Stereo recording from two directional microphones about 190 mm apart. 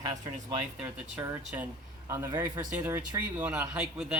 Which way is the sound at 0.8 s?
10° right (ahead or behind).